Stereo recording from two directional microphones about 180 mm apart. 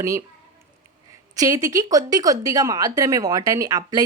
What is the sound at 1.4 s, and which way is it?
Speech, 20° right (ahead or behind).